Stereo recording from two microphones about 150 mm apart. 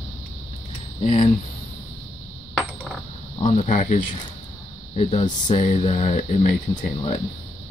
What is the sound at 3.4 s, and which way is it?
Speech, 50° left (ahead or behind).